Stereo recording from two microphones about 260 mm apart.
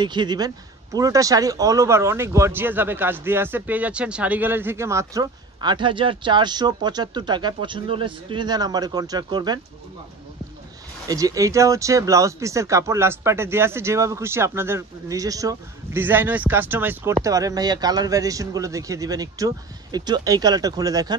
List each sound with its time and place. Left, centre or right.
0.0 s speech: centre
11.1 s speech: centre